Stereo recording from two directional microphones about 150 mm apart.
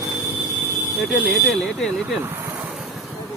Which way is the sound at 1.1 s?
Centre (ahead or behind).